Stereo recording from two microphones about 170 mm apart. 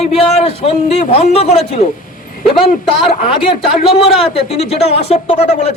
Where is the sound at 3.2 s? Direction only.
30° left (ahead or behind).